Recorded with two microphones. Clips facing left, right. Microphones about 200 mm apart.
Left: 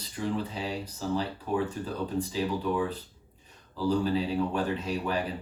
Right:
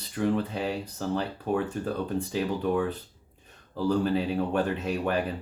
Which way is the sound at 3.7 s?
55° right (ahead or behind).